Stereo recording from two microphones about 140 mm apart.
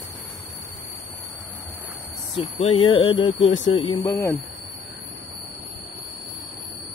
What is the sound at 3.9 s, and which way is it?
Speech, 25° left (ahead or behind).